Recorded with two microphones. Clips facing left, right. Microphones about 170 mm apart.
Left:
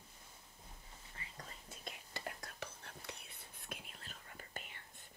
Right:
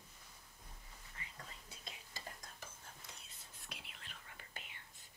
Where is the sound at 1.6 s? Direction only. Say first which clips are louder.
Left 4 dB; 60° left (ahead or behind); by 4.6 s 40° left (ahead or behind).